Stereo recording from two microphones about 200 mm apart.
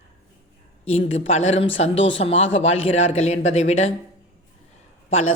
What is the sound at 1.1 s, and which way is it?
Speech, 30° left (ahead or behind).